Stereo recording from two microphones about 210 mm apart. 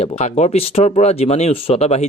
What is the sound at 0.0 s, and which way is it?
Speech, 30° left (ahead or behind).